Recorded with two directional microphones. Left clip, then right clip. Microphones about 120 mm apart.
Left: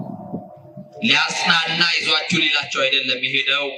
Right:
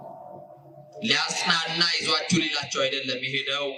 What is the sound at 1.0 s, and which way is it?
A man's voice, 20° right (ahead or behind).